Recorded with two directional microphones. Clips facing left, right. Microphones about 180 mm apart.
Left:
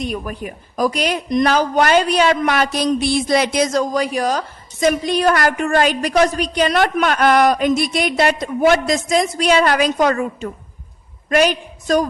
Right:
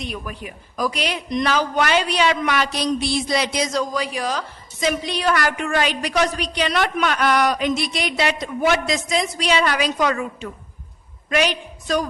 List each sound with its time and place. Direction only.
0.0 s a man's voice: 45° left (ahead or behind)